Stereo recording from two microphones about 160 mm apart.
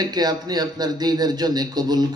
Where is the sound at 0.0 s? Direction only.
25° right (ahead or behind).